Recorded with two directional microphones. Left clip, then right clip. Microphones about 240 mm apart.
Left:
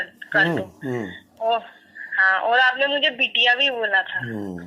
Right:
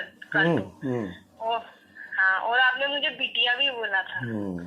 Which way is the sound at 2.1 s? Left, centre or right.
Left.